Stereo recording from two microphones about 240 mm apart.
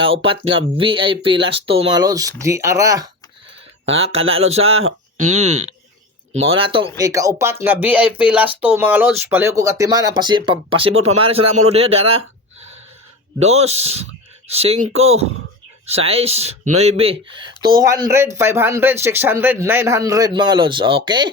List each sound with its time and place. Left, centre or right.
0.0 s speech: right
3.8 s speech: right
4.9 s a sound: right
5.3 s speech: right
6.6 s speech: right
13.4 s speech: right